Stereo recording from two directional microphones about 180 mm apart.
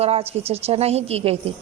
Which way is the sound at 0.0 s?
35° right (ahead or behind).